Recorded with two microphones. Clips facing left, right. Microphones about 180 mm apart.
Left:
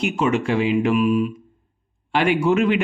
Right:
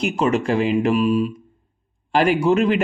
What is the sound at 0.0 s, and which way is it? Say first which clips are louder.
A man's voice: right 1 dB; 35° right (ahead or behind).